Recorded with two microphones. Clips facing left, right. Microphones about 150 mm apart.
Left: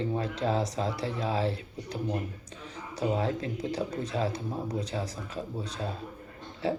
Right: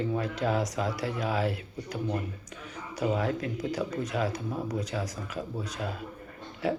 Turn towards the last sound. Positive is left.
turn(degrees=25)  # may be behind; listen again after turning